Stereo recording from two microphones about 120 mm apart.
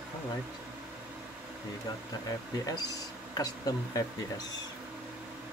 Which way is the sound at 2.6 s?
30° left (ahead or behind).